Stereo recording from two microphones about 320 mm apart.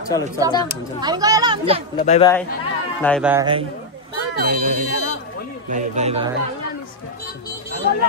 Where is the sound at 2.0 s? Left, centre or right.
Left.